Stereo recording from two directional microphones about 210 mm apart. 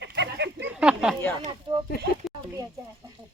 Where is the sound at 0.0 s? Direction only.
55° right (ahead or behind).